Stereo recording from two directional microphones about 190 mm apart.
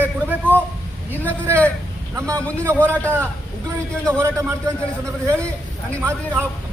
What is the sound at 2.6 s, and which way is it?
Speech, 10° right (ahead or behind).